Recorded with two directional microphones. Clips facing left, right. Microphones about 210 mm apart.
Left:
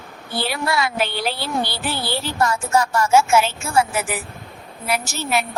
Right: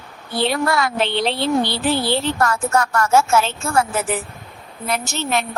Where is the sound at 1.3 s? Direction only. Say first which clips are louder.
Right 5 dB; 25° right (ahead or behind).